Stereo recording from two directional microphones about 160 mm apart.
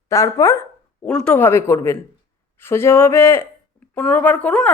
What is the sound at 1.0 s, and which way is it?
A woman's voice, 5° left (ahead or behind).